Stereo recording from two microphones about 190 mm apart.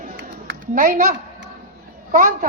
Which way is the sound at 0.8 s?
45° right (ahead or behind).